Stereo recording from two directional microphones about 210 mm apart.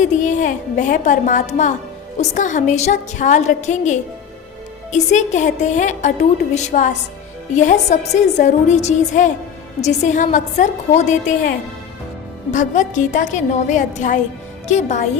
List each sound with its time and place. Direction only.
0.0 s a woman's voice: 35° left (ahead or behind)